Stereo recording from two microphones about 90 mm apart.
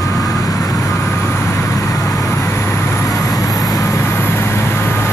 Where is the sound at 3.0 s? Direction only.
40° left (ahead or behind).